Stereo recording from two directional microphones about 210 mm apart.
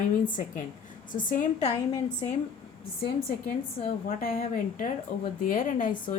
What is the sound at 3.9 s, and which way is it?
A woman's voice, 40° left (ahead or behind).